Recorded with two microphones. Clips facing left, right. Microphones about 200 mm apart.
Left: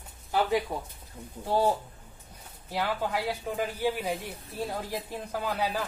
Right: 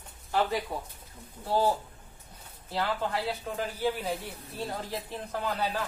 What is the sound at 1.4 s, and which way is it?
Speech, 15° left (ahead or behind).